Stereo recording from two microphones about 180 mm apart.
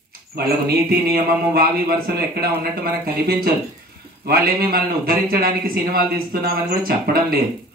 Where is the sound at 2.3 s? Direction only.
55° right (ahead or behind).